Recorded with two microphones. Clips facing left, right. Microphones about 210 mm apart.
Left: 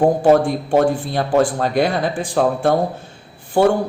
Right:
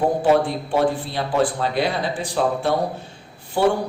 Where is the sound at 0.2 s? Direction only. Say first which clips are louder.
Left 4 dB; 45° left (ahead or behind).